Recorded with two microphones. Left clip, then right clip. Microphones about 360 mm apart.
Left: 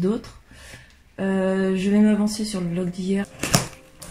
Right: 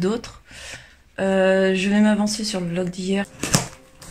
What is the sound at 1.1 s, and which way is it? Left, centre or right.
Speech, right.